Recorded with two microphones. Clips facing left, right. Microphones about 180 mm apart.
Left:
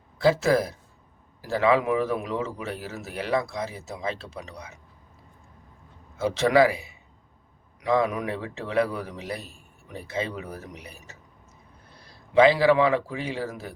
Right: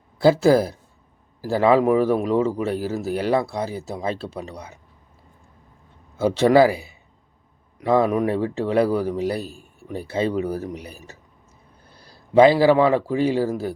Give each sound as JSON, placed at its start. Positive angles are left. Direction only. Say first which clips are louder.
{"t": 0.2, "sound": "speech", "louder": "right 6 dB", "side_deg": -35}
{"t": 6.1, "sound": "speech", "louder": "right 5 dB", "side_deg": -35}
{"t": 7.9, "sound": "speech", "louder": "right 5 dB", "side_deg": -40}
{"t": 12.3, "sound": "speech", "louder": "right 4 dB", "side_deg": -40}